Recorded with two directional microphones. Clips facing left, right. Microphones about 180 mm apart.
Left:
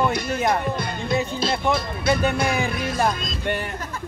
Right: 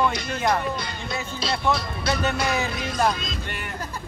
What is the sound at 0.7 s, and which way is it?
Music, 55° left (ahead or behind).